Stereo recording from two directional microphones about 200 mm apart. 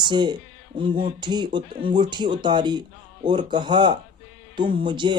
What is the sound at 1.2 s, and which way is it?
Speech, 20° right (ahead or behind).